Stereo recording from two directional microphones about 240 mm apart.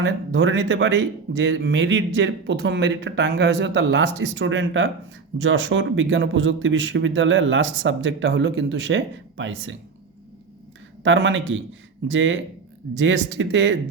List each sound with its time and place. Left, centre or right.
0.0 s speech: right
11.0 s speech: right